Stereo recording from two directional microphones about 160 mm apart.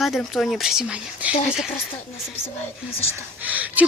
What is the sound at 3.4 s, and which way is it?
Speech, 10° right (ahead or behind).